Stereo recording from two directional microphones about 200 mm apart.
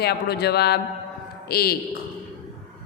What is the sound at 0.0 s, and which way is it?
A woman's voice, 55° left (ahead or behind).